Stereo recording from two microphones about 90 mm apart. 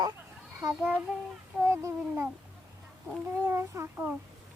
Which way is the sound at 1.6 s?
30° right (ahead or behind).